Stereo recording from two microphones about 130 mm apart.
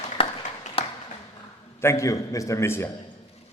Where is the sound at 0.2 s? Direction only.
45° left (ahead or behind).